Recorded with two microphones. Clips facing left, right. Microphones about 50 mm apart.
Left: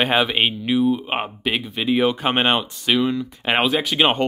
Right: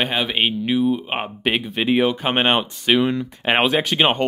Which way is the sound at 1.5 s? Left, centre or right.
Right.